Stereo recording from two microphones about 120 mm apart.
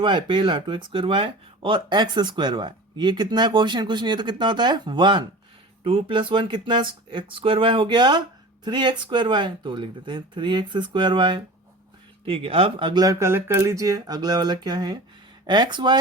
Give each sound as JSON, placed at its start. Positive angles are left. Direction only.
{"t": 0.0, "sound": "speech", "side_deg": -40}